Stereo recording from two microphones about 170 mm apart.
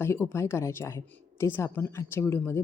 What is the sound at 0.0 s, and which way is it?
A woman's voice, 15° left (ahead or behind).